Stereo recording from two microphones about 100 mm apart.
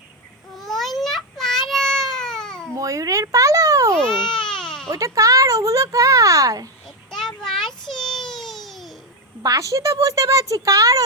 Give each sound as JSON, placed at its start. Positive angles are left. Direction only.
{"t": 0.5, "sound": "babbling", "side_deg": 0}
{"t": 2.7, "sound": "a sound", "side_deg": -35}
{"t": 3.9, "sound": "baby cry", "side_deg": 5}
{"t": 4.9, "sound": "speech", "side_deg": -35}
{"t": 6.8, "sound": "a sound", "side_deg": 5}
{"t": 9.4, "sound": "speech", "side_deg": -35}